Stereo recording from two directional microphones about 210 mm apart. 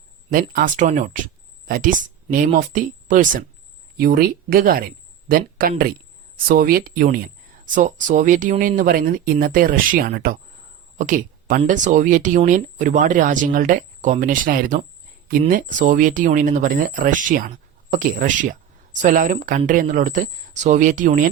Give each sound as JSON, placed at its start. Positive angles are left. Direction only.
{"t": 0.5, "sound": "speech", "side_deg": -40}